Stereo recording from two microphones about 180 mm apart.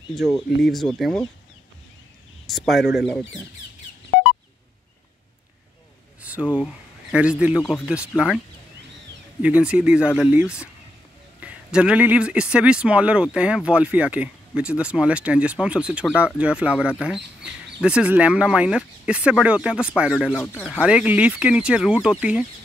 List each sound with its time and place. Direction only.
0.6 s speech: centre (ahead or behind)
2.4 s speech: centre (ahead or behind)
2.8 s speech: 70° left (ahead or behind)
6.5 s speech: 5° right (ahead or behind)
9.4 s a man's voice: 5° right (ahead or behind)
20.3 s speech: 10° left (ahead or behind)
20.8 s speech: 5° right (ahead or behind)